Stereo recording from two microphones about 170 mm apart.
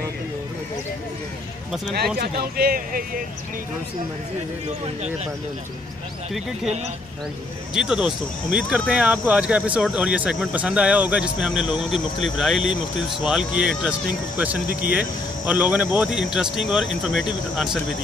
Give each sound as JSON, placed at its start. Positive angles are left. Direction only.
{"t": 2.1, "sound": "speech", "side_deg": -65}
{"t": 7.7, "sound": "speech", "side_deg": -5}